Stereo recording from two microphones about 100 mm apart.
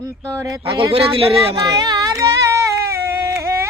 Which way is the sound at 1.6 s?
45° right (ahead or behind).